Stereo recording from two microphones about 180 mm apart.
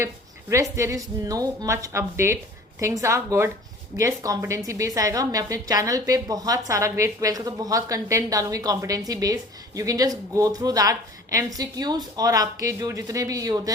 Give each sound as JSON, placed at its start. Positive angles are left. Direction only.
{"t": 0.5, "sound": "a woman's voice", "side_deg": -15}